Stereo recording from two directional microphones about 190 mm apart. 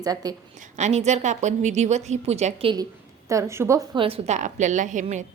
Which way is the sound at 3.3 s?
15° right (ahead or behind).